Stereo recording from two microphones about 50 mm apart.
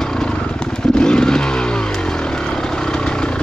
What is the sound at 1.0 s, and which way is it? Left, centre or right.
Vehicle, centre.